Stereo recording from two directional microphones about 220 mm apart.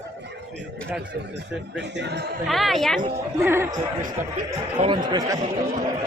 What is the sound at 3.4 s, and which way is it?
Speech, 10° right (ahead or behind).